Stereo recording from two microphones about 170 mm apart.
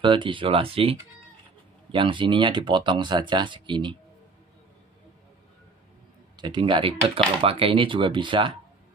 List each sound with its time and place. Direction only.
0.0 s speech: 30° right (ahead or behind)
6.3 s speech: 25° right (ahead or behind)